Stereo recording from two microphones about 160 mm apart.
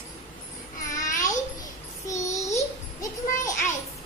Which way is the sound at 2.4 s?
20° left (ahead or behind).